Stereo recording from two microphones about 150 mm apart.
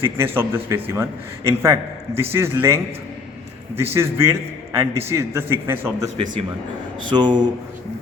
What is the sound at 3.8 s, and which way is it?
A man's voice, 15° right (ahead or behind).